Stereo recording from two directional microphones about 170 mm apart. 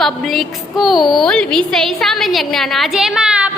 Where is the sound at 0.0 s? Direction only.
Centre (ahead or behind).